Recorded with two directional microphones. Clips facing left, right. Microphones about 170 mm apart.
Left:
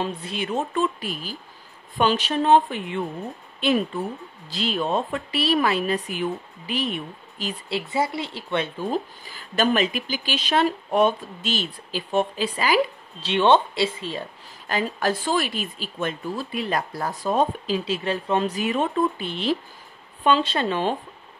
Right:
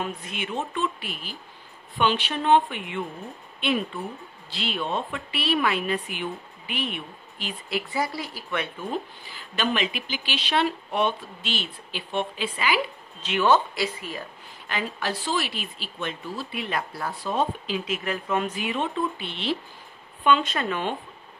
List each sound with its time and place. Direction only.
0.0 s speech: 30° left (ahead or behind)
7.7 s speech: 25° left (ahead or behind)
14.7 s speech: 45° left (ahead or behind)
20.2 s speech: 30° left (ahead or behind)